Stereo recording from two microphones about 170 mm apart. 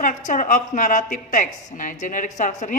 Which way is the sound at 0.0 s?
50° left (ahead or behind).